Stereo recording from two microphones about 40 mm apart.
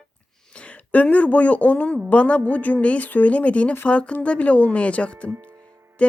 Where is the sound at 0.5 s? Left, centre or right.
Left.